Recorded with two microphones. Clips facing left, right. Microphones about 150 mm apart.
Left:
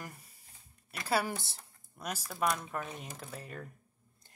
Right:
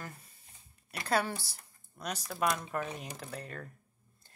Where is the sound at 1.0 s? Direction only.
5° left (ahead or behind).